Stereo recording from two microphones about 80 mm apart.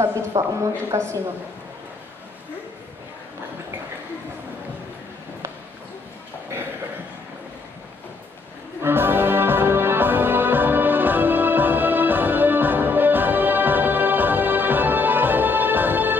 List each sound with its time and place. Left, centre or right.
0.4 s a woman's voice: right
8.8 s music: right